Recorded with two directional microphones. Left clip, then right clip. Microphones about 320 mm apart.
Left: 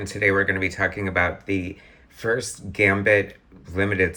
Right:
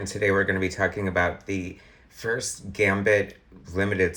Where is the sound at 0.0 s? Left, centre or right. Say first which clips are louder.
Left 3 dB; centre.